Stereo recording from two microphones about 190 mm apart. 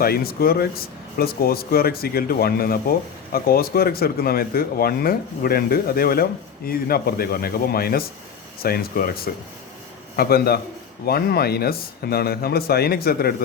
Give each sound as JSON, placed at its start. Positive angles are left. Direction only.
{"t": 0.0, "sound": "speech", "side_deg": 55}